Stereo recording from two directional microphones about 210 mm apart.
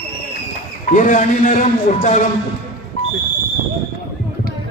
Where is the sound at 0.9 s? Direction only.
40° left (ahead or behind).